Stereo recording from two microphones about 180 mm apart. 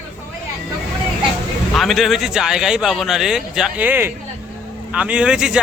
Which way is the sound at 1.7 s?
Centre (ahead or behind).